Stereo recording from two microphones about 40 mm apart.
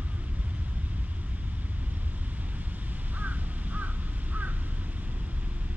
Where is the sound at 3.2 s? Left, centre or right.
Right.